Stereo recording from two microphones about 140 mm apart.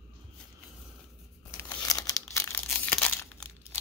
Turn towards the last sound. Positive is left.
turn(degrees=10)  # may be behind; listen again after turning